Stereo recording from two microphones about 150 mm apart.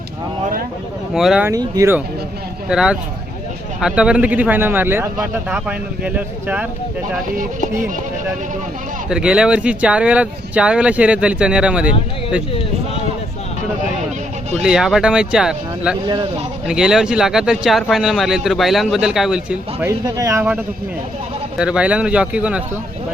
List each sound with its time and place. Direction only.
1.1 s speech: 5° right (ahead or behind)
1.5 s speech: 20° right (ahead or behind)
2.6 s speech: 5° right (ahead or behind)
9.0 s speech: 5° right (ahead or behind)
14.6 s speech: 5° right (ahead or behind)
19.9 s speech: 20° right (ahead or behind)